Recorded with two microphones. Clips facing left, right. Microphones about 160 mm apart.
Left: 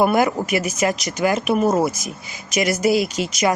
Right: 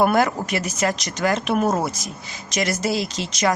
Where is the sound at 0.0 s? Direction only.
5° left (ahead or behind).